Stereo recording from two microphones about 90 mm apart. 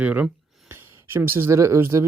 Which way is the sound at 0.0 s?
15° right (ahead or behind).